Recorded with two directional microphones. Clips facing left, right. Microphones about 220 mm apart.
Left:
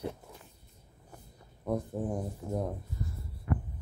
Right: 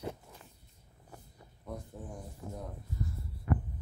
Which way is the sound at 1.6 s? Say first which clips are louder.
Left 11 dB; 70° left (ahead or behind).